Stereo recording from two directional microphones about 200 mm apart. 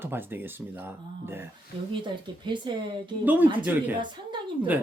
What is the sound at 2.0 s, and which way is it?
Speech, 25° right (ahead or behind).